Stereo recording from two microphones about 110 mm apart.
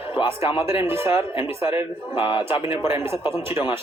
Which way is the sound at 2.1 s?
45° left (ahead or behind).